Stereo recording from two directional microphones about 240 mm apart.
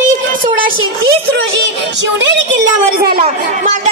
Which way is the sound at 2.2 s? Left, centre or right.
Right.